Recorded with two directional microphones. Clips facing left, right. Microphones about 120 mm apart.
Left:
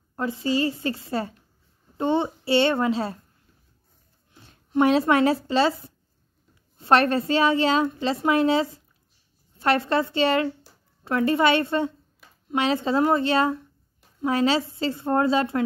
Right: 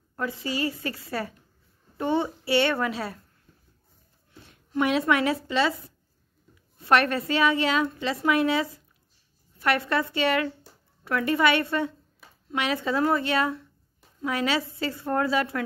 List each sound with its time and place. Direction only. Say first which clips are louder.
0.1 s a woman's voice: left 5 dB; 30° left (ahead or behind)
4.5 s a woman's voice: left 5 dB; 30° left (ahead or behind)